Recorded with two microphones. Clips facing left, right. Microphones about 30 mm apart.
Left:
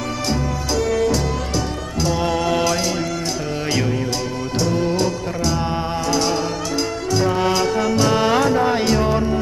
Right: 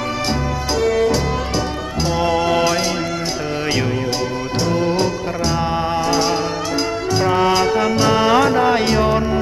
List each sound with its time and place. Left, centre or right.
0.8 s music: right
4.6 s music: centre
6.1 s music: centre